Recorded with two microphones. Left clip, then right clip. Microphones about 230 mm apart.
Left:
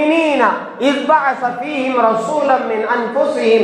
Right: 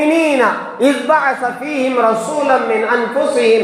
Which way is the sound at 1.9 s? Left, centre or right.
Right.